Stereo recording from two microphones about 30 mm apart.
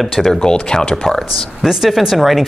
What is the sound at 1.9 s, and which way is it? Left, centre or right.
Speech, centre.